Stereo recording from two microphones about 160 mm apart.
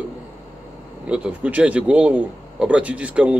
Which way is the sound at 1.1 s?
10° right (ahead or behind).